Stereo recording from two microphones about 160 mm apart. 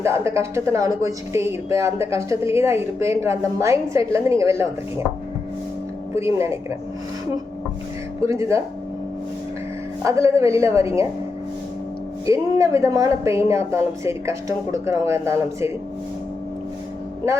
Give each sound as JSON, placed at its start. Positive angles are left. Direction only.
{"t": 0.0, "sound": "a woman's voice", "side_deg": -15}
{"t": 6.1, "sound": "a woman's voice", "side_deg": -15}
{"t": 8.2, "sound": "a woman's voice", "side_deg": -20}
{"t": 10.0, "sound": "a woman's voice", "side_deg": -20}
{"t": 12.2, "sound": "a woman's voice", "side_deg": -20}